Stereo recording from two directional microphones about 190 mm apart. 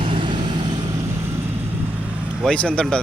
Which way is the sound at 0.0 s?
25° right (ahead or behind).